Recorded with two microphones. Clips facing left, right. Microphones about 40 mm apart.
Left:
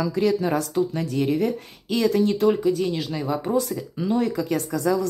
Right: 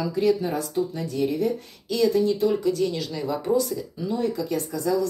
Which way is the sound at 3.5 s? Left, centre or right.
Left.